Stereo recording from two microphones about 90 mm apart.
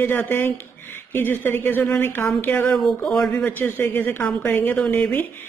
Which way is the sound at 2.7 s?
5° left (ahead or behind).